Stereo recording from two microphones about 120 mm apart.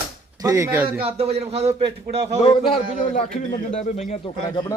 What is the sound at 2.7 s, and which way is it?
Speech, 90° left.